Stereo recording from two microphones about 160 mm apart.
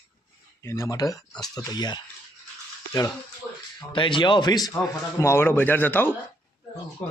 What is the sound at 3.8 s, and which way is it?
A man's voice, 30° left (ahead or behind).